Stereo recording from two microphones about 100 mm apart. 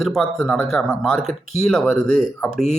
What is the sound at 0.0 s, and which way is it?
Speech, centre (ahead or behind).